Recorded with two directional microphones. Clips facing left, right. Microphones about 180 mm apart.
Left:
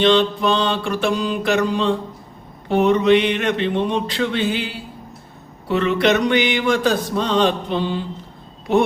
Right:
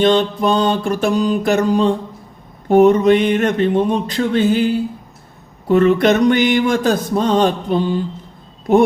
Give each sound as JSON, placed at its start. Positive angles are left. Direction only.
{"t": 0.0, "sound": "speech", "side_deg": -45}